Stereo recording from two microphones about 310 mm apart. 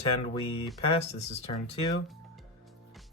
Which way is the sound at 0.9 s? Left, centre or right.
Centre.